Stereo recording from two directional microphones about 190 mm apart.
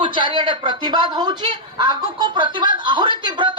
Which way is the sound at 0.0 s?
25° right (ahead or behind).